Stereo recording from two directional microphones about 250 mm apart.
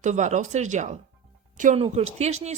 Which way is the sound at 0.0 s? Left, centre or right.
Right.